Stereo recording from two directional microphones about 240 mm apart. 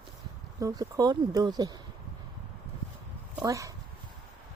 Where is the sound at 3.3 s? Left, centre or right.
Centre.